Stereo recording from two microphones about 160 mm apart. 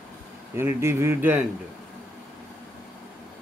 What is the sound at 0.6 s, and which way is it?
Speech, 15° right (ahead or behind).